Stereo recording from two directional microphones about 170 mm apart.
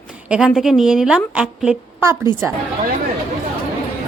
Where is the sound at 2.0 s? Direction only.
15° right (ahead or behind).